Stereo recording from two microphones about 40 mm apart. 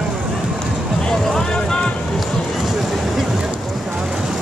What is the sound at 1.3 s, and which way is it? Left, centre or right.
Vehicle, centre.